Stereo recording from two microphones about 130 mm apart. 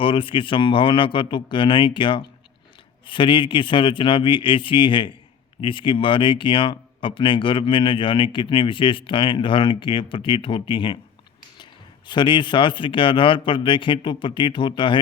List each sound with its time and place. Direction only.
0.0 s speech: 40° left (ahead or behind)